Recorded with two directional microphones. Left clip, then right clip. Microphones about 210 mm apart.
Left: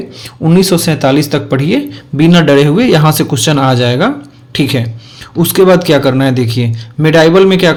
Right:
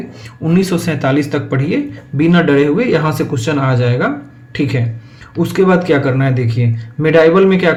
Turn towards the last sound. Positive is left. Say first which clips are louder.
# left 3 dB
turn(degrees=50)  # may be behind; listen again after turning